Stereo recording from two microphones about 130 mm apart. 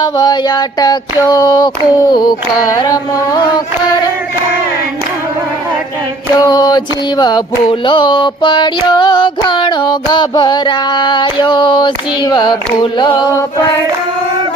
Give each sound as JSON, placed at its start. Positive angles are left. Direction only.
{"t": 0.0, "sound": "music", "side_deg": 35}
{"t": 6.3, "sound": "music", "side_deg": 30}